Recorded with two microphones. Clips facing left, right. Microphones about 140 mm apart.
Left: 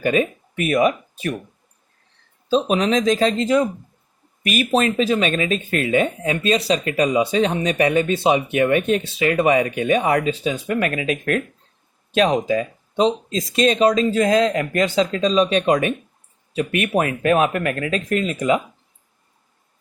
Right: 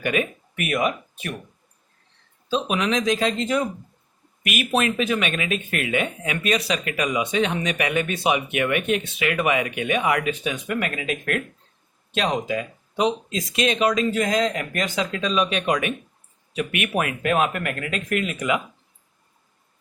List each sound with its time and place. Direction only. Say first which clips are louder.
0.0 s speech: left 5 dB; 30° left (ahead or behind)
2.5 s speech: left 5 dB; 35° left (ahead or behind)
12.5 s speech: left 6 dB; 35° left (ahead or behind)